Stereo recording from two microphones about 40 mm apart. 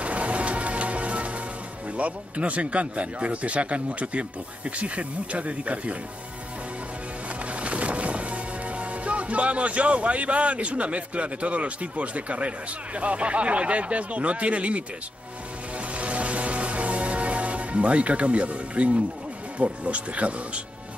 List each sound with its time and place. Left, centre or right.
0.0 s music: right
2.0 s speech: right
7.6 s speech: right
16.0 s music: right
19.6 s speech: right